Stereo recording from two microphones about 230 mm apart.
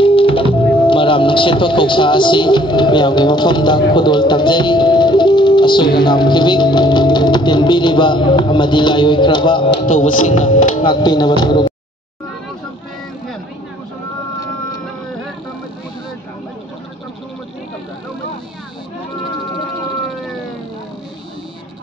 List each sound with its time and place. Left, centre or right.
0.0 s music: left
0.7 s speech: left
9.9 s speech: left
10.8 s music: centre